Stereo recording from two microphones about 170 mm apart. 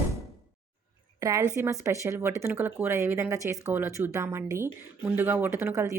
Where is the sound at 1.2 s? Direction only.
20° right (ahead or behind).